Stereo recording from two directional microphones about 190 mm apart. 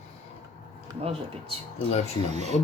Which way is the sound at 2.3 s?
35° right (ahead or behind).